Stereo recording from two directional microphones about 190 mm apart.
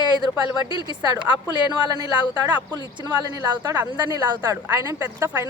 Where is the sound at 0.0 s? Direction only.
20° right (ahead or behind).